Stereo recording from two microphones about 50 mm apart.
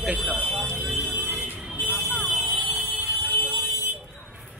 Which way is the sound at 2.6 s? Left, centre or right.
Centre.